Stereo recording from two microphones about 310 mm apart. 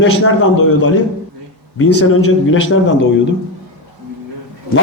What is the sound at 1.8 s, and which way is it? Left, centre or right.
A man's voice, left.